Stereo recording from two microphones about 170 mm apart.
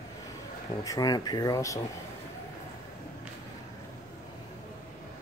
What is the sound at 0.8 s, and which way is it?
Speech, 20° left (ahead or behind).